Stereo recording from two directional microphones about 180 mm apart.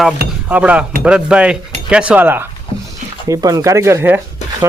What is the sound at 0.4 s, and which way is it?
Speech, 5° right (ahead or behind).